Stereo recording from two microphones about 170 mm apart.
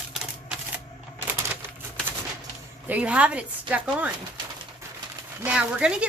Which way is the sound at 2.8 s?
10° right (ahead or behind).